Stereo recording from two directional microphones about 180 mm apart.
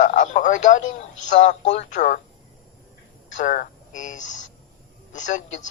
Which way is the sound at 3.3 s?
45° left (ahead or behind).